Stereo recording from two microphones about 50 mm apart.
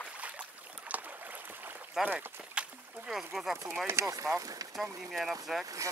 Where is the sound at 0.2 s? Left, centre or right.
Right.